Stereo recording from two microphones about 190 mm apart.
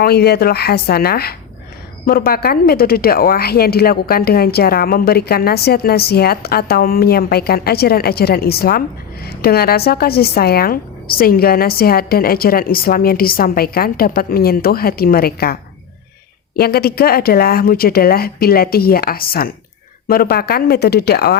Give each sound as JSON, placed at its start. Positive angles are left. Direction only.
{"t": 0.0, "sound": "a woman's voice", "side_deg": 55}
{"t": 16.6, "sound": "a woman's voice", "side_deg": 55}